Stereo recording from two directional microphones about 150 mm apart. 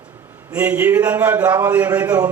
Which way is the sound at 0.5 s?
10° right (ahead or behind).